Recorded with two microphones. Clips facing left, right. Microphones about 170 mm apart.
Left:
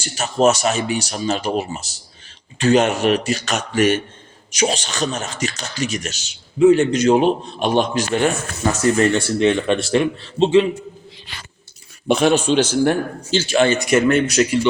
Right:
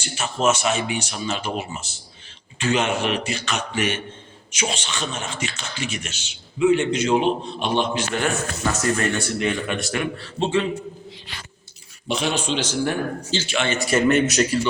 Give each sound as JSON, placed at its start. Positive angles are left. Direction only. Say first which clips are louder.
{"t": 0.0, "sound": "speech", "louder": "left 6 dB", "side_deg": 40}
{"t": 9.1, "sound": "speech", "louder": "left 7 dB", "side_deg": 25}
{"t": 12.0, "sound": "speech", "louder": "left 9 dB", "side_deg": 50}
{"t": 13.7, "sound": "speech", "louder": "left 5 dB", "side_deg": 15}
{"t": 14.1, "sound": "speech", "louder": "left 2 dB", "side_deg": 0}